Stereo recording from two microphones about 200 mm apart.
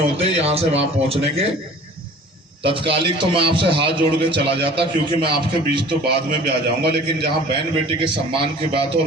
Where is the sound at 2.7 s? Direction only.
25° right (ahead or behind).